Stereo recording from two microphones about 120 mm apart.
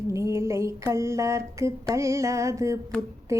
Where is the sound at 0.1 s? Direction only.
25° right (ahead or behind).